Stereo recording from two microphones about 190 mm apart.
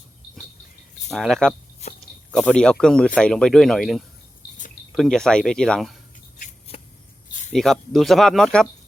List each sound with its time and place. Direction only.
1.1 s speech: centre (ahead or behind)
6.4 s a sound: 35° left (ahead or behind)
7.5 s speech: centre (ahead or behind)